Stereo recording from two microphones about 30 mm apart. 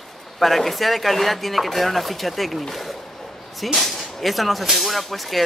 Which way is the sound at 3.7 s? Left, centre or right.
Centre.